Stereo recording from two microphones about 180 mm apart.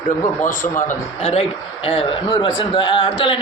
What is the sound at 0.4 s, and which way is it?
A man's voice, 45° left (ahead or behind).